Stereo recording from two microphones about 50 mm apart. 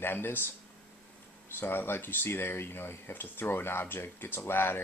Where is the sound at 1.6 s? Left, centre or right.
Left.